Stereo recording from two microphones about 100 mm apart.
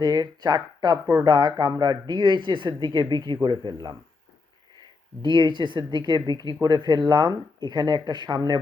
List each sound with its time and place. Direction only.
0.0 s speech: 45° right (ahead or behind)
5.2 s speech: 50° right (ahead or behind)